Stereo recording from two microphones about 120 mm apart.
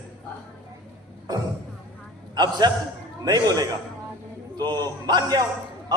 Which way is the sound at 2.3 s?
35° right (ahead or behind).